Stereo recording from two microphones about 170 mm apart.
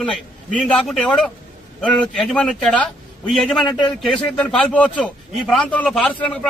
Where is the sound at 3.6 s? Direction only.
25° left (ahead or behind).